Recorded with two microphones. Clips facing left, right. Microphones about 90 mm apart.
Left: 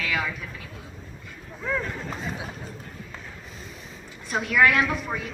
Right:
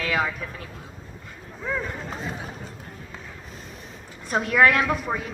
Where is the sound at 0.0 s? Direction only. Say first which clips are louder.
Right 3 dB; 35° right (ahead or behind).